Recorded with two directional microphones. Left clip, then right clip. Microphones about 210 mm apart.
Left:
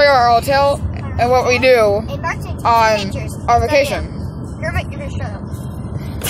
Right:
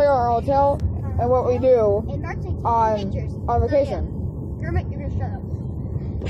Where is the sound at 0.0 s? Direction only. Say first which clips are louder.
Left 7 dB; 45° left (ahead or behind).